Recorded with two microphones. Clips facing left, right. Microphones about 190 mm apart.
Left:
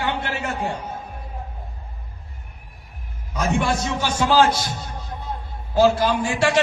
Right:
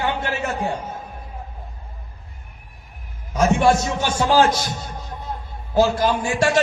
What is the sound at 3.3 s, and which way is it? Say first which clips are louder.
A man's voice: right 5 dB; 45° right (ahead or behind).